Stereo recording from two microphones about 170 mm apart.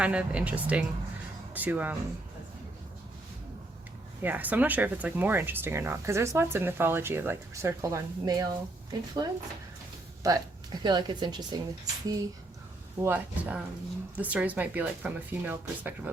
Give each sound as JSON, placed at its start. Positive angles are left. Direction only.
{"t": 0.0, "sound": "speech", "side_deg": -5}
{"t": 4.2, "sound": "a woman's voice", "side_deg": -10}
{"t": 13.0, "sound": "speech", "side_deg": -10}